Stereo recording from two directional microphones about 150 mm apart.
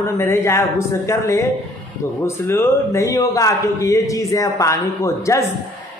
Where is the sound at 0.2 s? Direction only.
20° left (ahead or behind).